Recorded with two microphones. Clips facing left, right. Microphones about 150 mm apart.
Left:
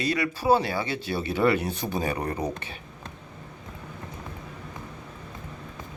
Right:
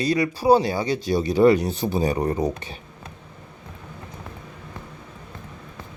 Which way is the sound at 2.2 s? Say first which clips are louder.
Right 7 dB; 15° right (ahead or behind).